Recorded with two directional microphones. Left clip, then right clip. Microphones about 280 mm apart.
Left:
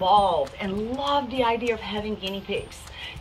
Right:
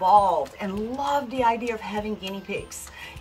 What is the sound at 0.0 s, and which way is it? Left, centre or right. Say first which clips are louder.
Speech: right 1 dB; centre.